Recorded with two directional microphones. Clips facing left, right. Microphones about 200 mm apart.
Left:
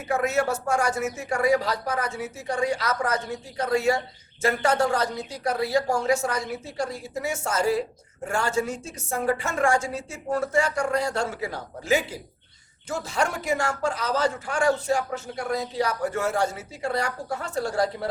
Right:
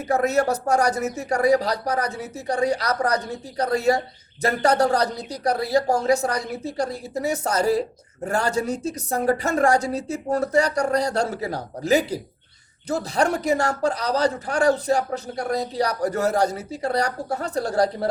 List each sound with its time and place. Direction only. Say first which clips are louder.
0.1 s a woman's voice: right 3 dB; 40° right (ahead or behind)